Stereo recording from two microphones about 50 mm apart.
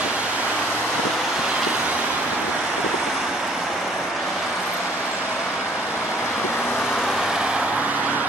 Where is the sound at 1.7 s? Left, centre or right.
Right.